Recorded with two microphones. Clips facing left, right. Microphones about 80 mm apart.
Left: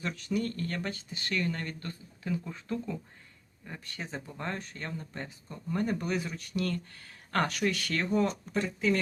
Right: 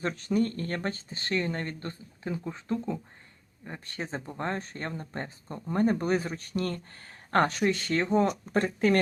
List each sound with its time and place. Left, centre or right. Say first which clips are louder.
0.0 s speech: right 5 dB; right
8.5 s speech: right 5 dB; right